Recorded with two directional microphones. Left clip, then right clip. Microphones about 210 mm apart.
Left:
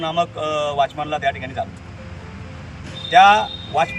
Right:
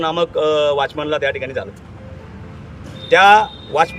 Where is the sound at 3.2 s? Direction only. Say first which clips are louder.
Right 1 dB; 20° right (ahead or behind).